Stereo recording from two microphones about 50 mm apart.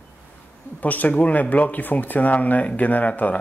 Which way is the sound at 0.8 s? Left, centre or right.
Left.